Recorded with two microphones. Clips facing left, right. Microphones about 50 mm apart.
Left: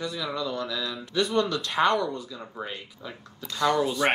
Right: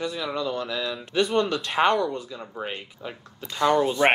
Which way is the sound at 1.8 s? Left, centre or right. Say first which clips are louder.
Right 2 dB; centre.